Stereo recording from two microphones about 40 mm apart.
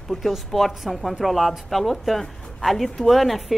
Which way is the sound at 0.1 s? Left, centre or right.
Centre.